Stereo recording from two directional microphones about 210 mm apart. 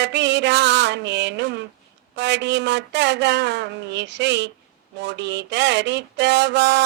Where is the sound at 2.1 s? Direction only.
55° right (ahead or behind).